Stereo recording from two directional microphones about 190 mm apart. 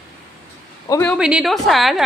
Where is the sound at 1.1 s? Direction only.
5° right (ahead or behind).